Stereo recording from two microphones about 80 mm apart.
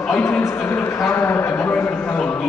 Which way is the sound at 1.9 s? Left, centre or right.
Centre.